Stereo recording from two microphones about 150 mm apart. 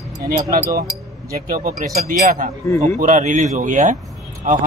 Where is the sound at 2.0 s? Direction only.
60° right (ahead or behind).